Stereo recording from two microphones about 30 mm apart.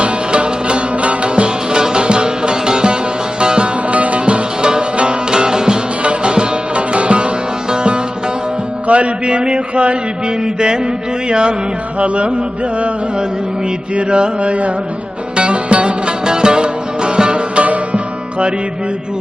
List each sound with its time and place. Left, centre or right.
0.0 s music: right
3.8 s music: right
4.6 s music: right
6.0 s music: right
8.9 s a sound: right
10.4 s mantra: right
11.9 s music: right
13.9 s mantra: right
15.4 s music: right
16.2 s music: right
17.6 s music: right